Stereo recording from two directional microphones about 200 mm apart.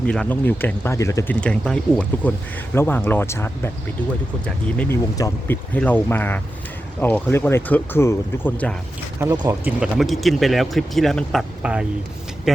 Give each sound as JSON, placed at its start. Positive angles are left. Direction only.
{"t": 0.0, "sound": "speech", "side_deg": 5}
{"t": 9.2, "sound": "speech", "side_deg": -20}
{"t": 9.8, "sound": "speech", "side_deg": 0}